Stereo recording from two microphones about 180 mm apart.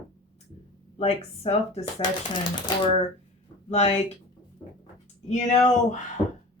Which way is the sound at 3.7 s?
35° left (ahead or behind).